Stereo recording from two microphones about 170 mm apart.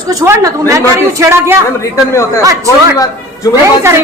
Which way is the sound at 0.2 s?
20° right (ahead or behind).